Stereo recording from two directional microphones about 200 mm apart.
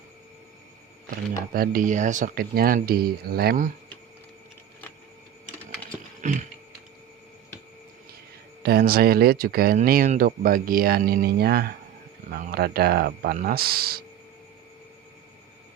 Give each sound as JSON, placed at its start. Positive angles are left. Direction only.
{"t": 1.5, "sound": "speech", "side_deg": -45}
{"t": 6.2, "sound": "a sound", "side_deg": -40}
{"t": 8.6, "sound": "speech", "side_deg": -50}